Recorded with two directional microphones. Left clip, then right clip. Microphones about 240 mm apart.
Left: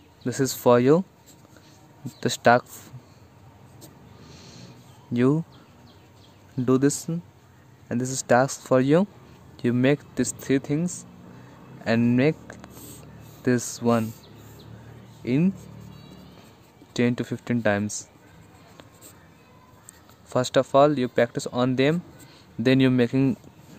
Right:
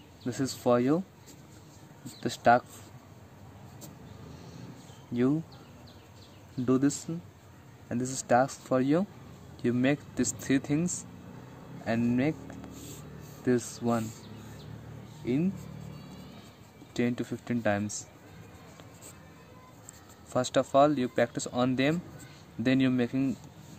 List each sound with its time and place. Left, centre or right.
0.2 s speech: left
2.1 s speech: left
4.3 s a sound: left
5.1 s speech: left
6.6 s speech: left
11.8 s a sound: left
13.4 s speech: left
15.2 s speech: left
16.9 s speech: left
20.2 s speech: left